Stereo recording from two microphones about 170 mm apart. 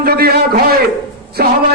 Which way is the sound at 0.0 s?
65° right (ahead or behind).